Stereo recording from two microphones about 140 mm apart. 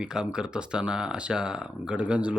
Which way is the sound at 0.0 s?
5° right (ahead or behind).